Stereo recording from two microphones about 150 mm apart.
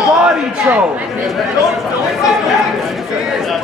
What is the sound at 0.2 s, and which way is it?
A man's voice, 5° right (ahead or behind).